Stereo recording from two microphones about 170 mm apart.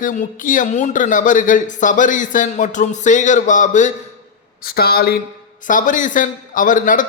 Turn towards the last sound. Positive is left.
turn(degrees=50)  # may be behind; listen again after turning